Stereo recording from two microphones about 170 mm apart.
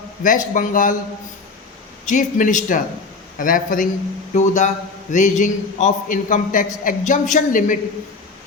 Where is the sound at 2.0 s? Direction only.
45° left (ahead or behind).